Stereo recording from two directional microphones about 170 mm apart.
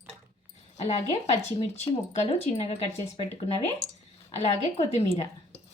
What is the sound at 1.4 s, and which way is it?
Speech, 40° left (ahead or behind).